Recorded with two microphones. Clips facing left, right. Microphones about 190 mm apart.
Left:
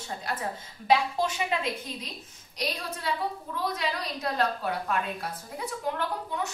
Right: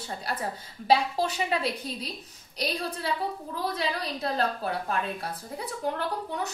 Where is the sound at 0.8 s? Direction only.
35° right (ahead or behind).